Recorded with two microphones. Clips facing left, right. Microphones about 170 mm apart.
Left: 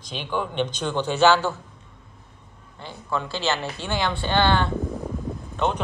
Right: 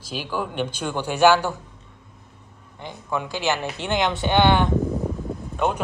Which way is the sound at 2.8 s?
15° right (ahead or behind).